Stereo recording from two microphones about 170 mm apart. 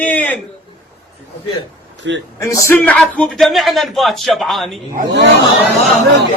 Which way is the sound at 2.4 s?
15° left (ahead or behind).